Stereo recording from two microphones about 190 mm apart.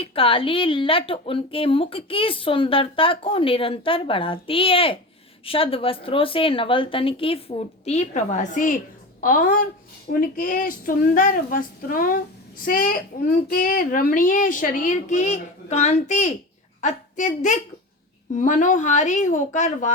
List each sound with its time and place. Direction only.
0.0 s a woman's voice: 30° left (ahead or behind)